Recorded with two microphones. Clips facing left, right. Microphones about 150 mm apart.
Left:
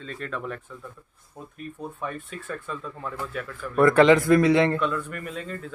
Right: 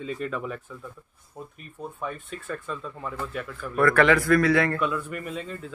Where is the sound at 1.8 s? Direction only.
Centre (ahead or behind).